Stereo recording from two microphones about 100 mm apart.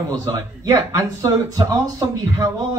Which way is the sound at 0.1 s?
40° right (ahead or behind).